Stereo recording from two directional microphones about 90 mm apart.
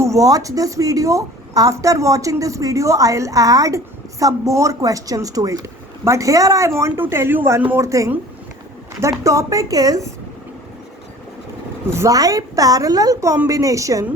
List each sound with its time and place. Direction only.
0.0 s a woman's voice: 40° right (ahead or behind)
7.8 s a woman's voice: 35° right (ahead or behind)
11.9 s a woman's voice: 35° right (ahead or behind)